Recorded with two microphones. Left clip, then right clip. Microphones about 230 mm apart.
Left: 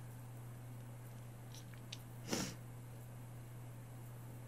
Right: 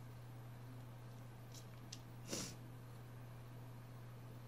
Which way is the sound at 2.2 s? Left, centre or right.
Left.